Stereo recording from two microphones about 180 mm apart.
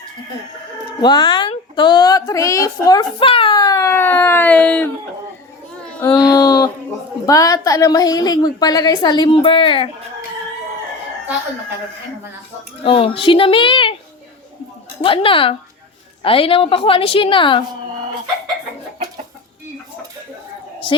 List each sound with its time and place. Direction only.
1.0 s a woman's voice: 25° left (ahead or behind); by 4.9 s 10° left (ahead or behind)
5.8 s child singing: 5° left (ahead or behind)
6.1 s a sound: 20° left (ahead or behind)
7.3 s a woman's voice: 20° left (ahead or behind)
12.8 s a woman's voice: 30° left (ahead or behind)
15.0 s a woman's voice: 30° left (ahead or behind)